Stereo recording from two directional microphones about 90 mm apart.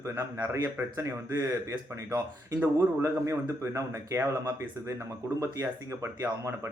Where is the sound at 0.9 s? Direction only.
35° right (ahead or behind).